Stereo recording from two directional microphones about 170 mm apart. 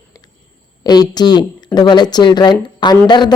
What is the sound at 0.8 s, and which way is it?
Speech, 25° left (ahead or behind).